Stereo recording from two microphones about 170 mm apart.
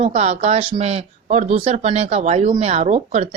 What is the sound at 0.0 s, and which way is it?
Speech, 35° right (ahead or behind).